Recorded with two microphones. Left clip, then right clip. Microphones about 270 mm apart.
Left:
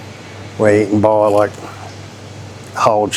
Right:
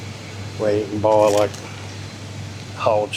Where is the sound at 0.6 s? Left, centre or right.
Left.